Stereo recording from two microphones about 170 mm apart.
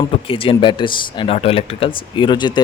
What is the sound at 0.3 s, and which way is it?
Speech, 30° left (ahead or behind).